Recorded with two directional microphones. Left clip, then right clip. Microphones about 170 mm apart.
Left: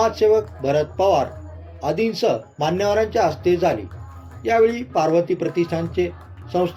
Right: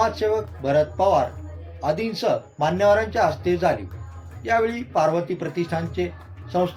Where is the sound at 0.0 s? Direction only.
25° left (ahead or behind).